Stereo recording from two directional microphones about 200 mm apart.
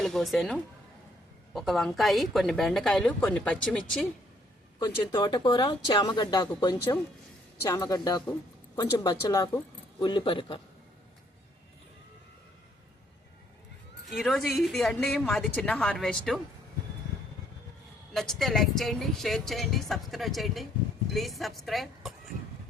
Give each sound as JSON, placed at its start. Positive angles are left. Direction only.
{"t": 0.0, "sound": "a woman's voice", "side_deg": 0}
{"t": 4.8, "sound": "speech", "side_deg": 20}
{"t": 14.1, "sound": "a woman's voice", "side_deg": 0}
{"t": 18.1, "sound": "a woman's voice", "side_deg": 0}